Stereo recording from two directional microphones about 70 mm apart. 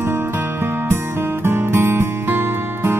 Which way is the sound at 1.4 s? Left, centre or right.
Right.